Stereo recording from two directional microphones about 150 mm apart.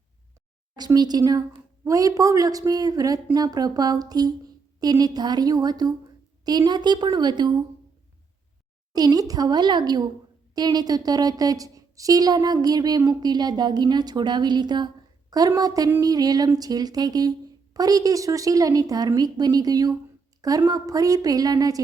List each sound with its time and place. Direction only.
0.8 s a woman's voice: 25° right (ahead or behind)
8.9 s a woman's voice: 25° right (ahead or behind)